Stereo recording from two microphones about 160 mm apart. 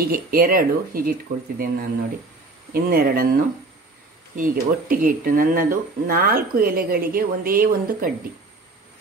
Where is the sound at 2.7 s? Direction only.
70° right (ahead or behind).